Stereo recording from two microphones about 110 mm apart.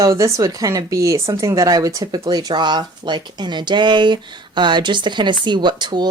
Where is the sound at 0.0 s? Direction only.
30° right (ahead or behind).